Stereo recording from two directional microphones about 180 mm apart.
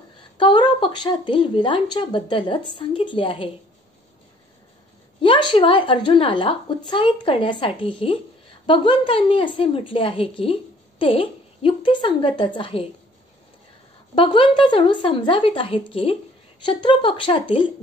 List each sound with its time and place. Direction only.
0.4 s a woman's voice: 25° left (ahead or behind)
5.2 s a woman's voice: 30° left (ahead or behind)
14.1 s a woman's voice: 30° left (ahead or behind)